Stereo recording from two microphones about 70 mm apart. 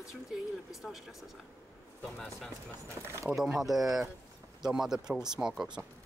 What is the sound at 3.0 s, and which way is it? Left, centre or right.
Speech, right.